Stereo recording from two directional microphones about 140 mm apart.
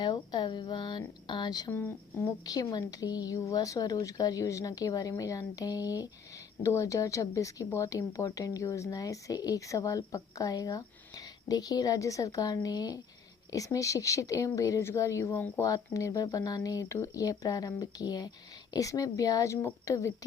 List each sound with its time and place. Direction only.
0.0 s speech: 30° left (ahead or behind)
1.7 s speech: 15° left (ahead or behind)